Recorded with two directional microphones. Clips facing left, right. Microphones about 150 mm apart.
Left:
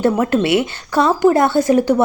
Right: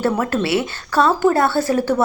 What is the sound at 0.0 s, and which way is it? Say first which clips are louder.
A woman's voice: left 4 dB; 15° left (ahead or behind).